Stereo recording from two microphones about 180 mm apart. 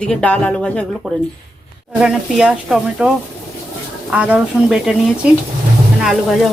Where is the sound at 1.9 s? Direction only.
5° right (ahead or behind).